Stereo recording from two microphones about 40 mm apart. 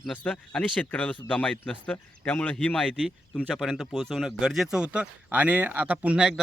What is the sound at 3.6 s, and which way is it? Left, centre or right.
Speech, centre.